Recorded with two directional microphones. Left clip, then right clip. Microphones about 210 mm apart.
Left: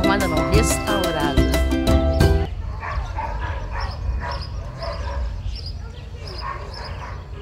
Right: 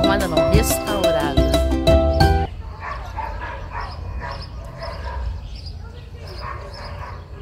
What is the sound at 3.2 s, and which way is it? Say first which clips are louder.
Bow-wow: left 1 dB; 15° right (ahead or behind).